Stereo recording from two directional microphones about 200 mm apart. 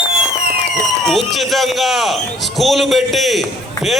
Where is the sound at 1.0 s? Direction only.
Centre (ahead or behind).